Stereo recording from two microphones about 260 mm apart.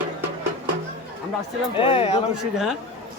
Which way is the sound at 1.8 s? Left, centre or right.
Centre.